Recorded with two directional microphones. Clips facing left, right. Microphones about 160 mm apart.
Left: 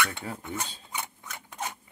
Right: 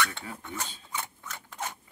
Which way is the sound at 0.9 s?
15° left (ahead or behind).